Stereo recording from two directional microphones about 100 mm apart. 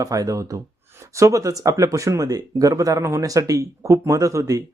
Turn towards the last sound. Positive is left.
turn(degrees=-35)  # may be behind; listen again after turning